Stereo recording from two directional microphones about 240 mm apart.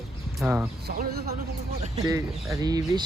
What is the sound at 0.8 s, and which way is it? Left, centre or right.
Speech, right.